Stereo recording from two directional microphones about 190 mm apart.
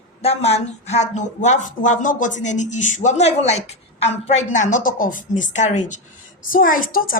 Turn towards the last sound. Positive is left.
turn(degrees=50)  # may be behind; listen again after turning